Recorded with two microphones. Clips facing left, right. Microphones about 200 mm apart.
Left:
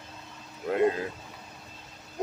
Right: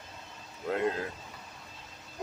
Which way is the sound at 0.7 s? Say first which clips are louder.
Left 5 dB; 5° left (ahead or behind).